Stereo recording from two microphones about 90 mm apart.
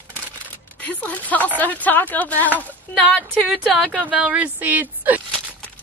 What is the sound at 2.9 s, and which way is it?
A woman's voice, 5° left (ahead or behind).